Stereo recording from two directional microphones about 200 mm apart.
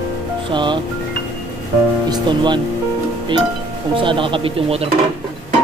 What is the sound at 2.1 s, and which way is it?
Speech, 20° right (ahead or behind).